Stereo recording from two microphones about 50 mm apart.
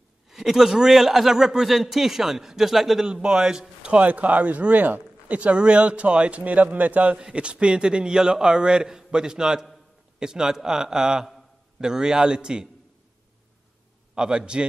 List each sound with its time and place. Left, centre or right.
0.3 s a man's voice: centre
3.1 s speech: centre
7.2 s a man's voice: centre
14.1 s speech: centre